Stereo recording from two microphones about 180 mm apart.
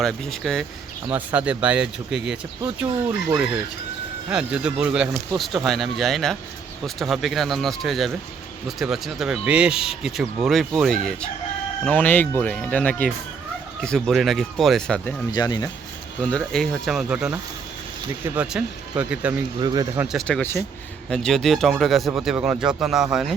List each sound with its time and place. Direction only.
0.0 s speech: centre (ahead or behind)
15.3 s speech: 25° left (ahead or behind)
16.4 s speech: centre (ahead or behind)
19.6 s speech: 20° right (ahead or behind)
20.1 s speech: centre (ahead or behind)